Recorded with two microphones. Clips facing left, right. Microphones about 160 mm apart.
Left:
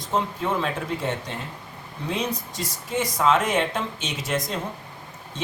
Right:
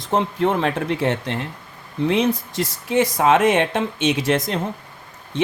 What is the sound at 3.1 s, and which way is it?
Speech, 75° right (ahead or behind).